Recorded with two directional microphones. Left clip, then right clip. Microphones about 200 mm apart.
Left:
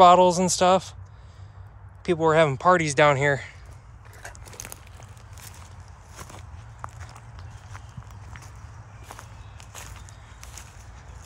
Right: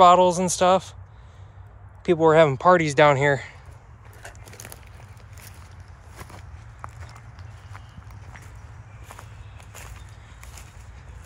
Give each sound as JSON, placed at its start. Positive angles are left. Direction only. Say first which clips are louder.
{"t": 0.0, "sound": "speech", "louder": "even", "side_deg": 20}
{"t": 2.0, "sound": "speech", "louder": "right 3 dB", "side_deg": 10}
{"t": 6.3, "sound": "walk", "louder": "even", "side_deg": 10}